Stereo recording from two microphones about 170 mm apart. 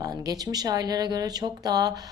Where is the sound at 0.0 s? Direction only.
20° right (ahead or behind).